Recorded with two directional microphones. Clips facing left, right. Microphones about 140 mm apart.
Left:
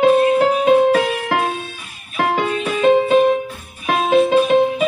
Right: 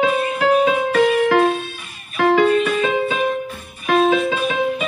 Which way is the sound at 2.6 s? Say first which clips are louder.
Left 4 dB; 40° left (ahead or behind).